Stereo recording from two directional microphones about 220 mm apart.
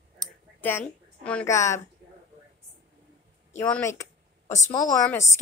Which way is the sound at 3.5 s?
10° left (ahead or behind).